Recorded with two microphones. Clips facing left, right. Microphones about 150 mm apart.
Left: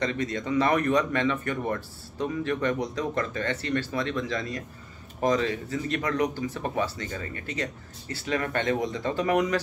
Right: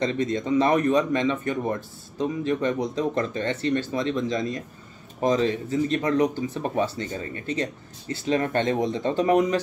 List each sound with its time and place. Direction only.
0.0 s speech: 25° right (ahead or behind)